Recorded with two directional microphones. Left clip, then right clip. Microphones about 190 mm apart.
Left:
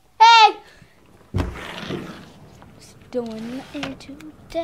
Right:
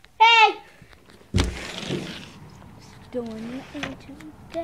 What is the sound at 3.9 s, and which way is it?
Speech, 30° left (ahead or behind).